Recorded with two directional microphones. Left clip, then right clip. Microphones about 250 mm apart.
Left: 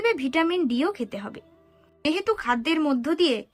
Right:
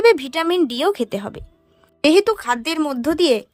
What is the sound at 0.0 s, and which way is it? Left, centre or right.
A woman's voice, right.